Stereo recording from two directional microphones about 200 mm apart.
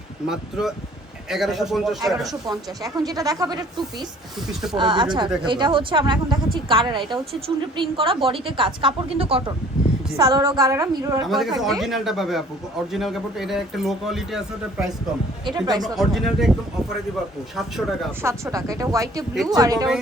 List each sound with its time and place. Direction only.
0.3 s a man's voice: centre (ahead or behind)
2.5 s speech: 20° right (ahead or behind)
4.4 s a man's voice: centre (ahead or behind)
4.8 s a woman's voice: 25° right (ahead or behind)
10.2 s speech: 15° right (ahead or behind)
11.3 s a man's voice: centre (ahead or behind)
15.5 s a woman's voice: 20° right (ahead or behind)
15.8 s a man's voice: centre (ahead or behind)
17.6 s a man's voice: centre (ahead or behind)
18.2 s speech: 15° right (ahead or behind)
19.3 s a man's voice: centre (ahead or behind)
19.5 s a woman's voice: 20° right (ahead or behind)